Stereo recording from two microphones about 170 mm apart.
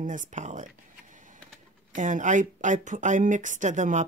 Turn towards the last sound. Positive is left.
turn(degrees=-45)  # may be behind; listen again after turning